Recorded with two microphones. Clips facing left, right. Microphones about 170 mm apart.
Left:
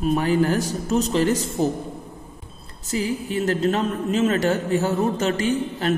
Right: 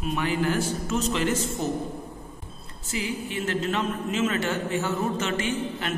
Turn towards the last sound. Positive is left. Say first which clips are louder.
# left 6 dB
turn(degrees=40)  # may be behind; listen again after turning